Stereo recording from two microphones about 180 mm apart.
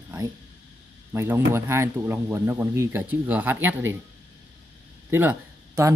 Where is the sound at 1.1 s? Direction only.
15° right (ahead or behind).